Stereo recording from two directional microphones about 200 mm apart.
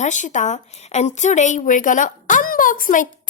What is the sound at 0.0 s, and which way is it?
A woman's voice, 35° left (ahead or behind).